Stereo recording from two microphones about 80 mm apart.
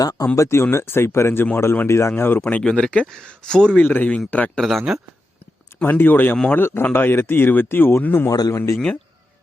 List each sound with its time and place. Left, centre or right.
0.0 s speech: left
0.3 s speech: left
1.9 s speech: left
2.4 s speech: centre
3.8 s speech: left
5.8 s speech: left
8.3 s speech: left
8.5 s speech: left